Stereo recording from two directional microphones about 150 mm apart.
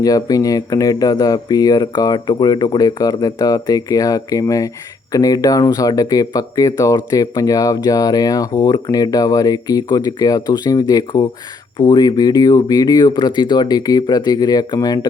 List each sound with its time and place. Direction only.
0.0 s speech: 25° left (ahead or behind)